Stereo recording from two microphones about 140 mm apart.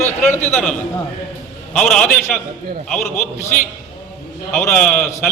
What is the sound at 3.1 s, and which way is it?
Speech, 60° left (ahead or behind).